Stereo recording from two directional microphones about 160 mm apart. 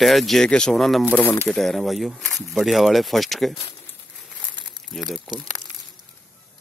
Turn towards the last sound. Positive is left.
turn(degrees=0)  # may be behind; listen again after turning